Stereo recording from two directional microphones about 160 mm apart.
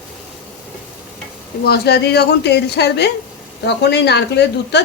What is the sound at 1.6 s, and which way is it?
A woman's voice, 85° left.